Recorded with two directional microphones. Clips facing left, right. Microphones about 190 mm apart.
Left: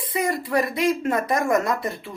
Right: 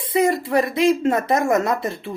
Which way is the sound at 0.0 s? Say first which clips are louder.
Right 6 dB; 25° right (ahead or behind).